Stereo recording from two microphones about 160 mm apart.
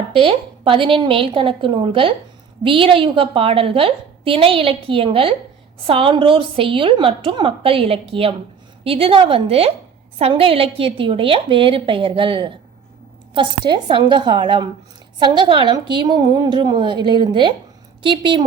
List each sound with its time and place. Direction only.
0.1 s a woman's voice: 35° right (ahead or behind)